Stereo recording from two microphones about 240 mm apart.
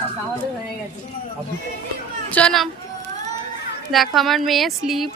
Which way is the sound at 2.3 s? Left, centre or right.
Centre.